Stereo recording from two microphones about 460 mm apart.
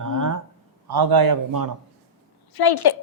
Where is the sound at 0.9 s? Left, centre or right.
Right.